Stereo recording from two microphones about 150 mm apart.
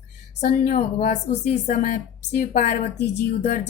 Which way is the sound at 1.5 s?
80° left.